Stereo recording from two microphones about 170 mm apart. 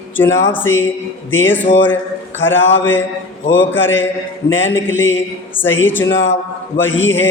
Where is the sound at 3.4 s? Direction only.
90° left.